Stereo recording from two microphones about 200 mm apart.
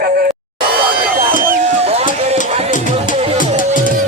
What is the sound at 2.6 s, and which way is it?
Music, 40° left (ahead or behind).